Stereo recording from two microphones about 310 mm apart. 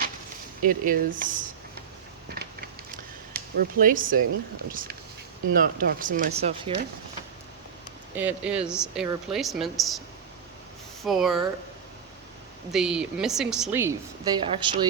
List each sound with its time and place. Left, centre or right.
0.6 s speech: right
2.3 s a sound: right
4.7 s speech: right
8.1 s a woman's voice: centre
11.0 s a woman's voice: centre
12.7 s a woman's voice: centre